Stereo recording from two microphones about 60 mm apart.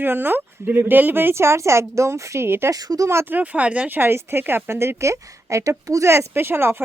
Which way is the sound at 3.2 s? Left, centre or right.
Right.